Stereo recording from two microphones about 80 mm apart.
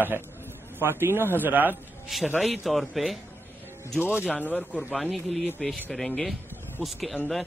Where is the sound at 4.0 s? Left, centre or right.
Centre.